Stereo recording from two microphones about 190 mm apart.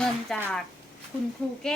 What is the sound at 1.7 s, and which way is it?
Speech, 5° left (ahead or behind).